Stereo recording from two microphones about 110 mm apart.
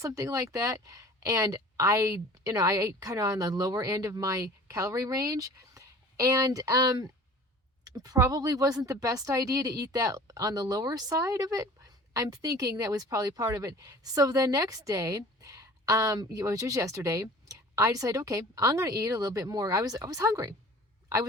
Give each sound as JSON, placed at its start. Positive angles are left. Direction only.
{"t": 0.0, "sound": "a woman's voice", "side_deg": -30}